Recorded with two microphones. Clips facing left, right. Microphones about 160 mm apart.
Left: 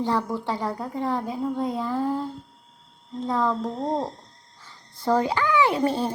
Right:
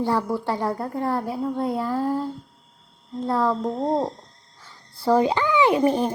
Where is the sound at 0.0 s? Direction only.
10° right (ahead or behind).